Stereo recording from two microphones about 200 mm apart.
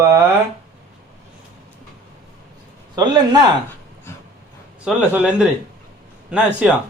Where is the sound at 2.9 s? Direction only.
20° right (ahead or behind).